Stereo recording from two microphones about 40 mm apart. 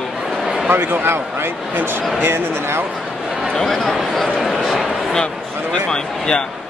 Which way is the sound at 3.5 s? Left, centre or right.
Centre.